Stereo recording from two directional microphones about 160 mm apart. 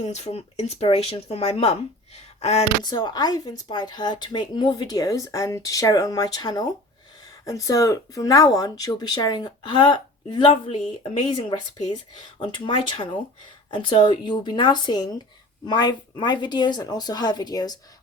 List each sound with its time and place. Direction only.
0.0 s speech: 45° left (ahead or behind)
2.1 s a sound: 40° left (ahead or behind)
2.8 s a woman's voice: 25° left (ahead or behind)